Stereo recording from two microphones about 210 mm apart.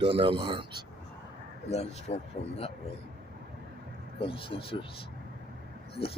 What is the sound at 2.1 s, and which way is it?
Speech, 30° left (ahead or behind).